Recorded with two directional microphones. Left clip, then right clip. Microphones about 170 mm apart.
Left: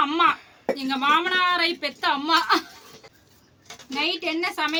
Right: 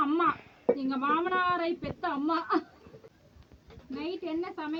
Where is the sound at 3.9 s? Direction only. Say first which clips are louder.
Left 11 dB; 20° left (ahead or behind).